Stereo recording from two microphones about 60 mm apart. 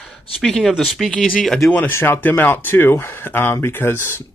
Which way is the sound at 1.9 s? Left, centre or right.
Left.